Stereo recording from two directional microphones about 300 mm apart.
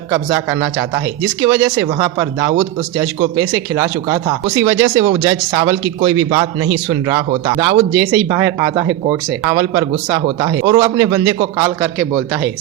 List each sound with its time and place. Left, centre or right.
0.1 s speech: centre
6.3 s speech: centre